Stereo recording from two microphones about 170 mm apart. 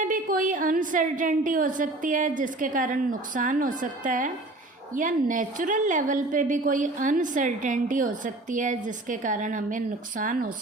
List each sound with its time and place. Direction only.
0.0 s a woman's voice: 50° right (ahead or behind)